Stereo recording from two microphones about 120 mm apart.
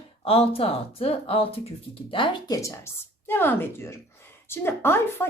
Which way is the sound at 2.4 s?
25° left (ahead or behind).